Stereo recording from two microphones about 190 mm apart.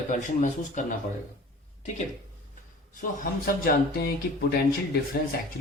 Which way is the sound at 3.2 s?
50° left (ahead or behind).